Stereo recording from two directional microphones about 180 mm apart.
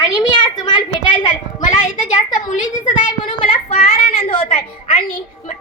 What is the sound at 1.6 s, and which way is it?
A child's voice, 45° left (ahead or behind).